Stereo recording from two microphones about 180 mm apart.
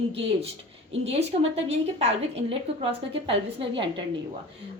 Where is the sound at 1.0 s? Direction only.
35° right (ahead or behind).